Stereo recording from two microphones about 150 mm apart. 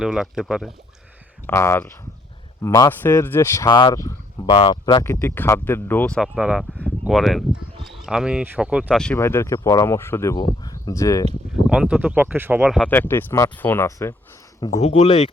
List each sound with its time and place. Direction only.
0.0 s speech: 5° right (ahead or behind)
1.5 s speech: 15° left (ahead or behind)
3.7 s speech: 30° left (ahead or behind)
5.0 s speech: 15° left (ahead or behind)
6.1 s speech: 5° right (ahead or behind)
7.1 s speech: centre (ahead or behind)
9.1 s speech: 15° left (ahead or behind)
11.7 s speech: 5° right (ahead or behind)
12.9 s speech: 15° left (ahead or behind)
14.8 s speech: 45° left (ahead or behind)